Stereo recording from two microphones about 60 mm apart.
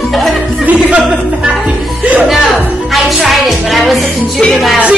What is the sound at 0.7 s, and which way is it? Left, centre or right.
Music, right.